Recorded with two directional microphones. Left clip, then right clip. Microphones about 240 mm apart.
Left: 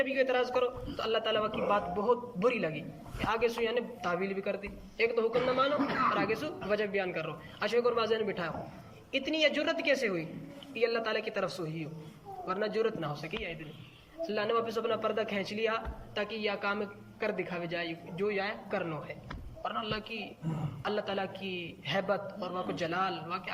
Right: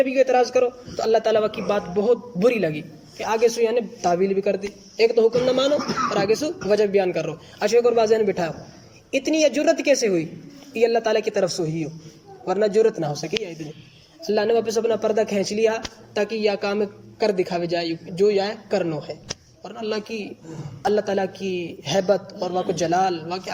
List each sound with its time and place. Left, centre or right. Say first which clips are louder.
0.0 s a man's voice: right 11 dB; right